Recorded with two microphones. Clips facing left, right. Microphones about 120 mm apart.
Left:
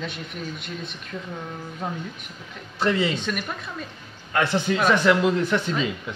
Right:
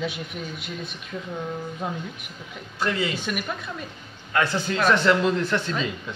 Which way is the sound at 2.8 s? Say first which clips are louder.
Left 3 dB; 25° left (ahead or behind).